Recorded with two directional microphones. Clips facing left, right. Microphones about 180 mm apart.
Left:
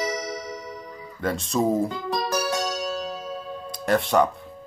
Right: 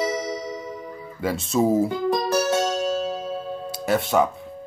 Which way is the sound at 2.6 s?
30° right (ahead or behind).